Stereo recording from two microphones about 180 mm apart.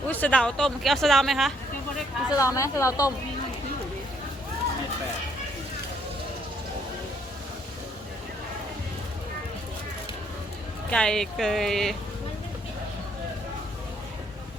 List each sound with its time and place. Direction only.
0.1 s speech: 10° left (ahead or behind)
2.3 s speech: 20° left (ahead or behind)
10.9 s speech: 5° left (ahead or behind)